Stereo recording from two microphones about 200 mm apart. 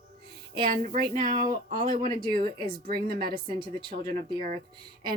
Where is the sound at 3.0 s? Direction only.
50° right (ahead or behind).